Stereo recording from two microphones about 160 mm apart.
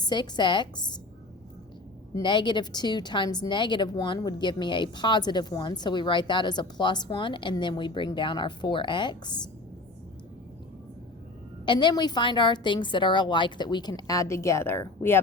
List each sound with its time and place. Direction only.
0.0 s a woman's voice: 25° left (ahead or behind)
2.2 s a woman's voice: 30° left (ahead or behind)
11.6 s a woman's voice: 30° left (ahead or behind)